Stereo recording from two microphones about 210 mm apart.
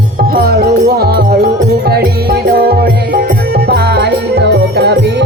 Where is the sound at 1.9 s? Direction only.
50° right (ahead or behind).